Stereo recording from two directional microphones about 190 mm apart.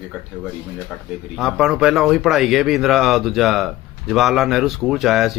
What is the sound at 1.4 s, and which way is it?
Speech, 5° right (ahead or behind).